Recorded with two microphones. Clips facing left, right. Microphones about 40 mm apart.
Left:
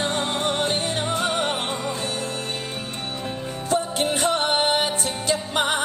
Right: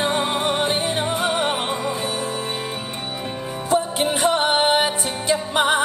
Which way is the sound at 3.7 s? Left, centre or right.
Centre.